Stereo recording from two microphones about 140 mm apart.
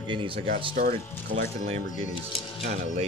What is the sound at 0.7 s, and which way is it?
Speech, 85° right.